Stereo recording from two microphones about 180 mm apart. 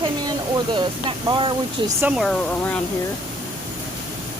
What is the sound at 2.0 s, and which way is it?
Speech, 5° right (ahead or behind).